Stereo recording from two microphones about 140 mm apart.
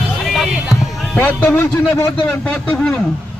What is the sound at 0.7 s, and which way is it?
A man's voice, 15° left (ahead or behind).